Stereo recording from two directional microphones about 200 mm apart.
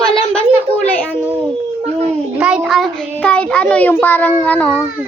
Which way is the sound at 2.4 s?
5° right (ahead or behind).